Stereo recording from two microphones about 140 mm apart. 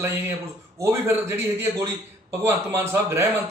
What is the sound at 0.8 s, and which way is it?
A man's voice, 15° right (ahead or behind).